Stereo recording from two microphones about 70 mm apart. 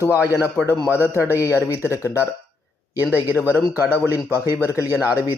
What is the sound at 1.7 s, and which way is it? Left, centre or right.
Speech, left.